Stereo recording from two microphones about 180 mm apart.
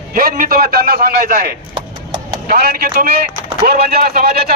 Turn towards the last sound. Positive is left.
turn(degrees=-55)  # may be behind; listen again after turning